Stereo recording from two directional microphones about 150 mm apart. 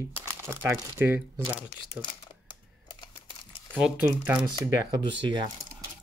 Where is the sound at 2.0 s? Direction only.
30° left (ahead or behind).